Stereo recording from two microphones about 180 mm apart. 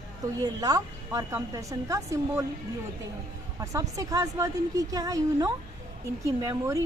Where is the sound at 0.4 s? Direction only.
20° right (ahead or behind).